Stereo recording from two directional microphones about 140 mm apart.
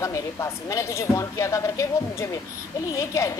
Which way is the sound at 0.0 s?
25° left (ahead or behind).